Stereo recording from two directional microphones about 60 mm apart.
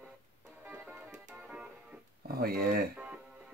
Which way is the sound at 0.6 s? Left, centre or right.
Right.